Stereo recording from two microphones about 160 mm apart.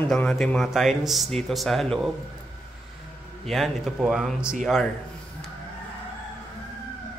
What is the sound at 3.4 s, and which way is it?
A man's voice, centre (ahead or behind).